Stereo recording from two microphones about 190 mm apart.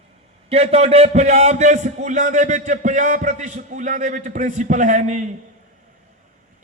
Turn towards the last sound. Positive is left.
turn(degrees=-40)  # may be behind; listen again after turning